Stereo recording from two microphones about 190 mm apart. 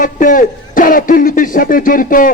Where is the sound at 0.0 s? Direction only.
45° left (ahead or behind).